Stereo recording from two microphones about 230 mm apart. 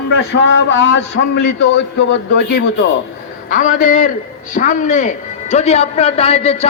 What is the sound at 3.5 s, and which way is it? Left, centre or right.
A man's voice, left.